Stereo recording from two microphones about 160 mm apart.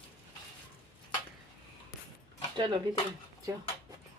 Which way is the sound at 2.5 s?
30° right (ahead or behind).